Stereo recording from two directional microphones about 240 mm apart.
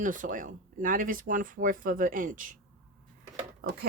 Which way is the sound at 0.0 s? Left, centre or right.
Right.